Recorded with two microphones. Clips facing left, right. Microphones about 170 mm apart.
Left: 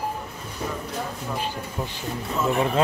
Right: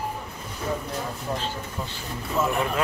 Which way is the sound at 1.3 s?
15° left (ahead or behind).